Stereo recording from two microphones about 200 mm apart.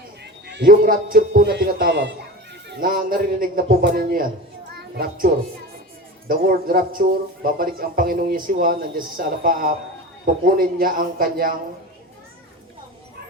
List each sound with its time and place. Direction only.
0.4 s a man's voice: 60° right (ahead or behind)
2.6 s a man's voice: 45° right (ahead or behind)
4.7 s a sound: 55° right (ahead or behind)
6.2 s a man's voice: 45° right (ahead or behind)